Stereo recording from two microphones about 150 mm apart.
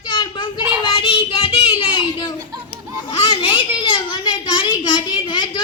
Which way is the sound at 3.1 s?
35° left (ahead or behind).